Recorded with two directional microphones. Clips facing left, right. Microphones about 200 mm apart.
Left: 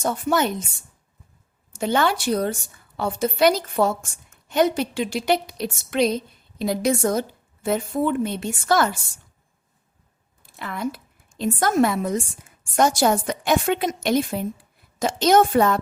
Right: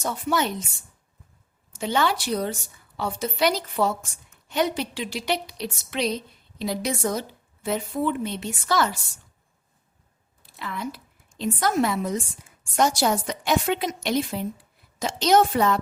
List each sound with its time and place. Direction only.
0.0 s a woman's voice: 50° left (ahead or behind)
1.8 s a woman's voice: 50° left (ahead or behind)
10.4 s a woman's voice: 50° left (ahead or behind)